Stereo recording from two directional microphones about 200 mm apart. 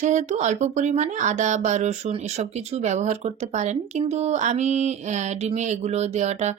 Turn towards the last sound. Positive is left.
turn(degrees=-35)  # may be behind; listen again after turning